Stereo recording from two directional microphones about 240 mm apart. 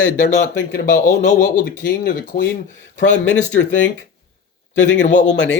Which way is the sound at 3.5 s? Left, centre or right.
Left.